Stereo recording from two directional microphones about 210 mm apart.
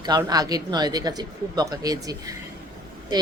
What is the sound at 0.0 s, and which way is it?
Speech, 20° right (ahead or behind).